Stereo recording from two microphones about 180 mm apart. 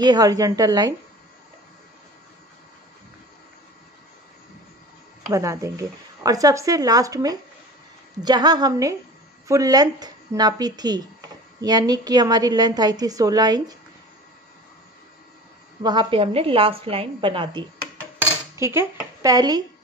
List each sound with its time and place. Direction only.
0.0 s speech: 20° right (ahead or behind)
5.3 s speech: 15° right (ahead or behind)
15.8 s a woman's voice: 25° right (ahead or behind)
18.6 s speech: 15° right (ahead or behind)